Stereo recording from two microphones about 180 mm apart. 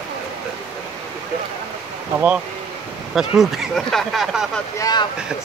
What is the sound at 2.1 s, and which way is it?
Speech, 10° right (ahead or behind).